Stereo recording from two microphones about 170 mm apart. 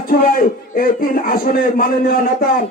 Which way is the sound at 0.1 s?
55° left (ahead or behind).